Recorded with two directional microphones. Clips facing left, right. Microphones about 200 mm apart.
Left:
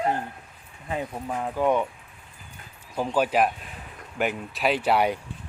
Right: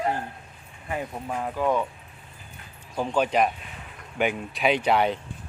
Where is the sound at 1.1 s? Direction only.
Centre (ahead or behind).